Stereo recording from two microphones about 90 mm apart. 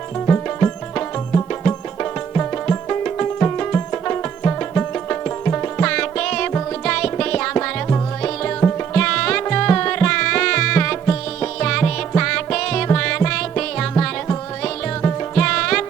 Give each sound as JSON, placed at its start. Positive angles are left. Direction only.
{"t": 0.3, "sound": "music", "side_deg": 20}